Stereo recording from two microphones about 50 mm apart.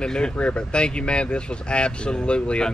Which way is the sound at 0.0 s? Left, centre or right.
Centre.